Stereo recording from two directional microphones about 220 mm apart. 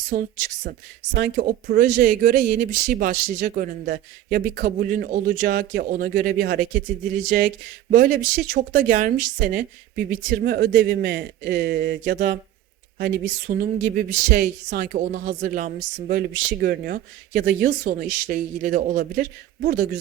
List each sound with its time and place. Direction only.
0.1 s speech: 35° right (ahead or behind)
0.6 s speech: 50° right (ahead or behind)